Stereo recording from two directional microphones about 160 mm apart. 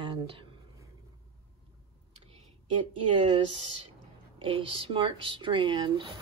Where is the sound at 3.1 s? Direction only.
35° right (ahead or behind).